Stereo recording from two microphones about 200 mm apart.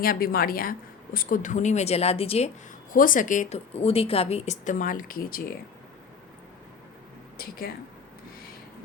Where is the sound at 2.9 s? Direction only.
45° left (ahead or behind).